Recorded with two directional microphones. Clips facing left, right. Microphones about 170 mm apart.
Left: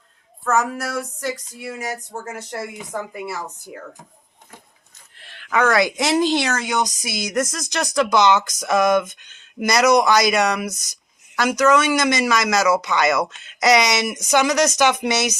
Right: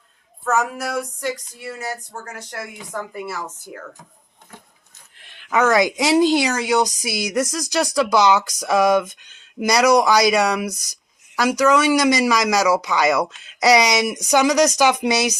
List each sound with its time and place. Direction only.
0.4 s a sound: centre (ahead or behind); by 2.2 s 15° left (ahead or behind)
2.3 s a woman's voice: 25° left (ahead or behind)
5.2 s speech: 20° right (ahead or behind)